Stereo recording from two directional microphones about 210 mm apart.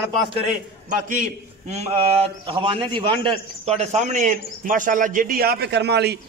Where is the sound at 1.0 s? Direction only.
40° right (ahead or behind).